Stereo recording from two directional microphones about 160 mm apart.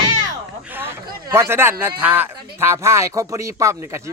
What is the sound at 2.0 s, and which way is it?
Speech, 10° right (ahead or behind).